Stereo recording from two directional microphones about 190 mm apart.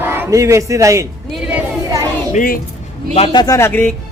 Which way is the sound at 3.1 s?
30° left (ahead or behind).